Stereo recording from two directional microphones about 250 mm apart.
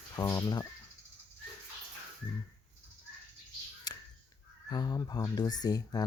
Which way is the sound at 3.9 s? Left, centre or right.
Centre.